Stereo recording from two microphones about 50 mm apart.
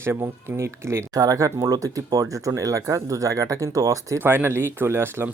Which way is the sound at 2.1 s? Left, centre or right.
Right.